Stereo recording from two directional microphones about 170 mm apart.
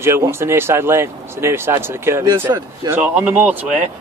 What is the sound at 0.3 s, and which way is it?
A man's voice, 15° right (ahead or behind).